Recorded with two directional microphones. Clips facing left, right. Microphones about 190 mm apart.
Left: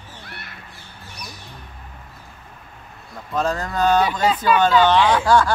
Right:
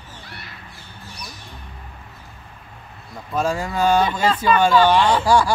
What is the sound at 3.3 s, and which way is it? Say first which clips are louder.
Speech: even; 10° right (ahead or behind).